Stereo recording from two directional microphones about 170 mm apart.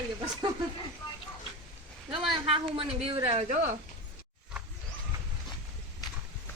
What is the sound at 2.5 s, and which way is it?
A woman's voice, 30° right (ahead or behind).